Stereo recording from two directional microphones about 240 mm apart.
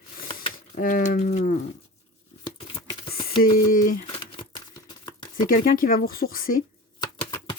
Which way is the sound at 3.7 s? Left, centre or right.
Left.